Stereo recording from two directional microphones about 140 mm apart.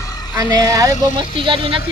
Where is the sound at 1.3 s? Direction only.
35° right (ahead or behind).